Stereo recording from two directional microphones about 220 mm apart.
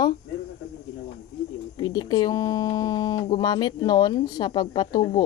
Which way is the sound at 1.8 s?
20° left (ahead or behind).